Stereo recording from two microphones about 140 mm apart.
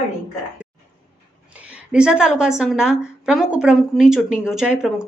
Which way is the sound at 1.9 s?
5° right (ahead or behind).